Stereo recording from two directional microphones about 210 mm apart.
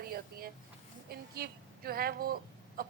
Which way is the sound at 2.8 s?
45° right (ahead or behind).